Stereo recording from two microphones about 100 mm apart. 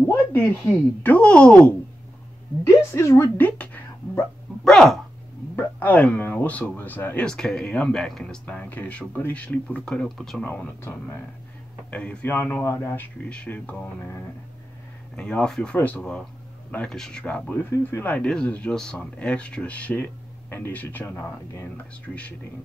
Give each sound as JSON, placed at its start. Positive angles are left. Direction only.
{"t": 0.0, "sound": "speech", "side_deg": 25}
{"t": 2.6, "sound": "speech", "side_deg": 25}
{"t": 3.3, "sound": "speech", "side_deg": 15}
{"t": 4.6, "sound": "speech", "side_deg": 5}
{"t": 5.8, "sound": "speech", "side_deg": 15}
{"t": 7.2, "sound": "speech", "side_deg": 5}
{"t": 10.8, "sound": "speech", "side_deg": 25}
{"t": 11.9, "sound": "speech", "side_deg": 15}
{"t": 12.6, "sound": "speech", "side_deg": 30}
{"t": 13.2, "sound": "speech", "side_deg": 10}
{"t": 15.1, "sound": "speech", "side_deg": 10}